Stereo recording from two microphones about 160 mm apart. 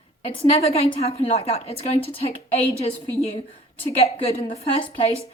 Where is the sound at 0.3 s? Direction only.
40° left (ahead or behind).